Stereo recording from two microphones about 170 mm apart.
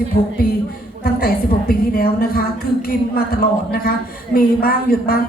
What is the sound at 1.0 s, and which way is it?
A woman's voice, 60° left (ahead or behind).